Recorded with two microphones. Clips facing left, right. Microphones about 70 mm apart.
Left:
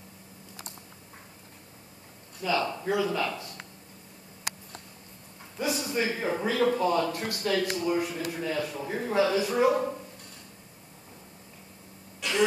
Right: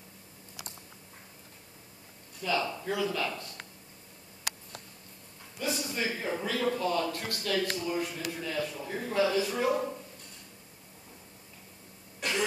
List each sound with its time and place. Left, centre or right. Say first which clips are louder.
2.4 s speech: left 3 dB; centre
5.6 s speech: left 4 dB; centre
6.0 s speech: left 4 dB; left
9.2 s speech: left 4 dB; centre
12.2 s throat clearing: left 1 dB; right